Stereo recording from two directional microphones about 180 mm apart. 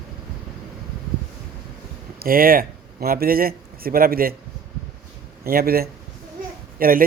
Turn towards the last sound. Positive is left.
turn(degrees=-50)  # may be behind; listen again after turning